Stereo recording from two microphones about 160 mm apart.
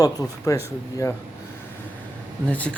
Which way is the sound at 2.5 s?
10° left (ahead or behind).